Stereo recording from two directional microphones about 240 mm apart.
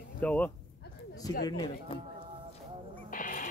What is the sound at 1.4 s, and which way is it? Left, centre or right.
Speech, centre.